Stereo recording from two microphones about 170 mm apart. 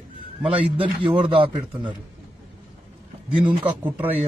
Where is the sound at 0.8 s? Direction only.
30° right (ahead or behind).